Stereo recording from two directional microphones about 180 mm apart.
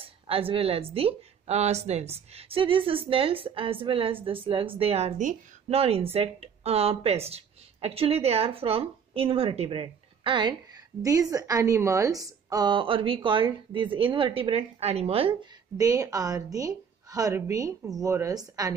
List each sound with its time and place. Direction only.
0.0 s speech: 30° right (ahead or behind)
15.8 s speech: 20° right (ahead or behind)